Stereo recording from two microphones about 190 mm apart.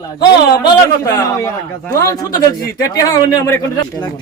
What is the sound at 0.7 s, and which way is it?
A man's voice, 15° left (ahead or behind).